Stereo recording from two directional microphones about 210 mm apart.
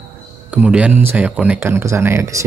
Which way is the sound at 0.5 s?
5° right (ahead or behind).